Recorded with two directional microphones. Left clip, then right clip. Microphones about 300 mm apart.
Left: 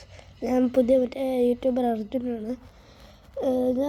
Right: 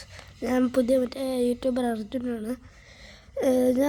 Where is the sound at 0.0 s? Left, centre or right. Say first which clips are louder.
Left 1 dB; right.